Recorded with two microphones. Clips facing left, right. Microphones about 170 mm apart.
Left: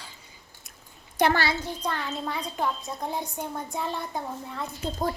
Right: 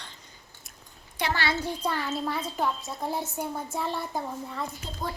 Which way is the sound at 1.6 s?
10° right (ahead or behind).